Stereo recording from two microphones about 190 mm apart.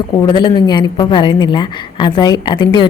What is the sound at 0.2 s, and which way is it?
A woman's voice, 25° left (ahead or behind).